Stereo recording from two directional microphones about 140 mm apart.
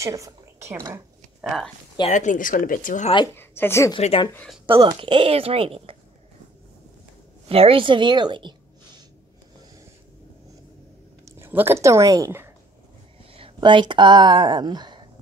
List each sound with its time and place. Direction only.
0.0 s a woman's voice: 20° right (ahead or behind)
1.4 s speech: centre (ahead or behind)
2.0 s speech: 60° left (ahead or behind)
3.3 s speech: 15° left (ahead or behind)
4.6 s a woman's voice: 40° right (ahead or behind)
7.4 s a woman's voice: 45° right (ahead or behind)
11.2 s speech: 20° right (ahead or behind)
13.3 s speech: 40° right (ahead or behind)